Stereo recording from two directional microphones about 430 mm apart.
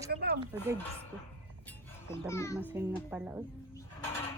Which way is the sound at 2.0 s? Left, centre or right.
Centre.